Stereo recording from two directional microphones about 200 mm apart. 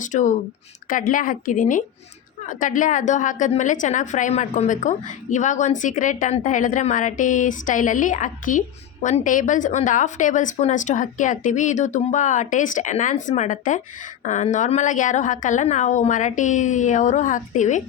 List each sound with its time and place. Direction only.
0.0 s a woman's voice: 40° left (ahead or behind)